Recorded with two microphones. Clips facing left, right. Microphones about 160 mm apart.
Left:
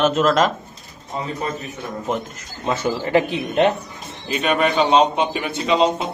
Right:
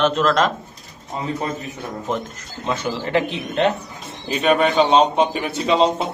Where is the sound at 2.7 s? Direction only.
10° left (ahead or behind).